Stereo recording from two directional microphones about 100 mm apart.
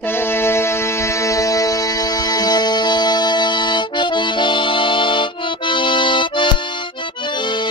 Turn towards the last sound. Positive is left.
turn(degrees=55)  # may be behind; listen again after turning